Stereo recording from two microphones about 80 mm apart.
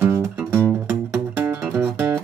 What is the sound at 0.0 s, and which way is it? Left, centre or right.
Music, right.